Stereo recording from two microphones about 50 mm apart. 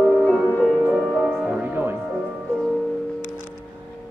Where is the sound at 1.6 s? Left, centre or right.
Right.